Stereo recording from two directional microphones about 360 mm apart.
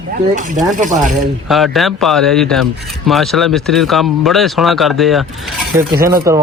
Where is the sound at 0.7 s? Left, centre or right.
Right.